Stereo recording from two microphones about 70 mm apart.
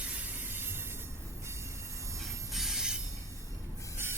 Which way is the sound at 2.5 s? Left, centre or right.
Centre.